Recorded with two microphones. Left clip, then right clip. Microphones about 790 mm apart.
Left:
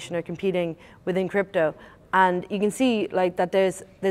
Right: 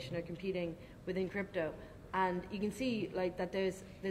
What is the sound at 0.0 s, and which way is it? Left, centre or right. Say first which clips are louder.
Speech: left 14 dB; left.